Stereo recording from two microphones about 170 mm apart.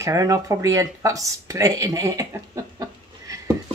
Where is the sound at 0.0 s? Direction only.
20° right (ahead or behind).